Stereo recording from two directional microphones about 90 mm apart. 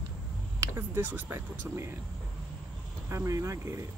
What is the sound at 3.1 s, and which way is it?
Speech, 35° right (ahead or behind).